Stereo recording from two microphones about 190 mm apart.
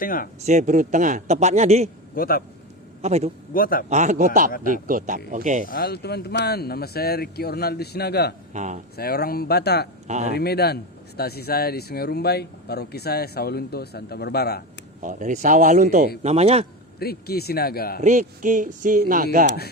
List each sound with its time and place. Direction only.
0.0 s a man's voice: 45° left (ahead or behind)
0.4 s a man's voice: 40° right (ahead or behind)
2.1 s a man's voice: 50° left (ahead or behind)
3.0 s a man's voice: 35° right (ahead or behind)
3.5 s a man's voice: 50° left (ahead or behind)
3.8 s a man's voice: 40° right (ahead or behind)
5.6 s speech: 50° left (ahead or behind)
8.5 s a man's voice: 40° right (ahead or behind)
9.0 s speech: 55° left (ahead or behind)
10.1 s a man's voice: 35° right (ahead or behind)
10.3 s speech: 55° left (ahead or behind)
15.0 s a man's voice: 40° right (ahead or behind)
17.0 s speech: 55° left (ahead or behind)
18.0 s a man's voice: 40° right (ahead or behind)